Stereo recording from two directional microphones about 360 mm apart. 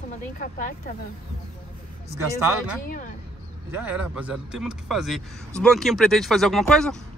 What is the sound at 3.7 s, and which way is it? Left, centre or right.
Speech, centre.